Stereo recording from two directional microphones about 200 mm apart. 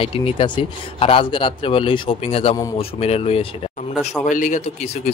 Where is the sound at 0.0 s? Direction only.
25° left (ahead or behind).